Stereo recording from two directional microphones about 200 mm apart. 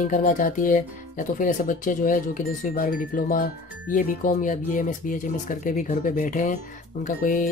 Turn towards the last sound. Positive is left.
turn(degrees=40)  # may be behind; listen again after turning